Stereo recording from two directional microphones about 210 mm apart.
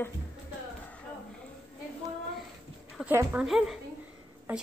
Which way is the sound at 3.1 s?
10° right (ahead or behind).